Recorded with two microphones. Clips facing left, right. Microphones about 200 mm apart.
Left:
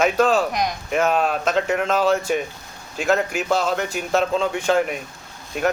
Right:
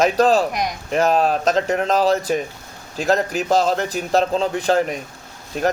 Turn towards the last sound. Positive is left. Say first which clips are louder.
# right 1 dB
turn(degrees=-35)  # may be behind; listen again after turning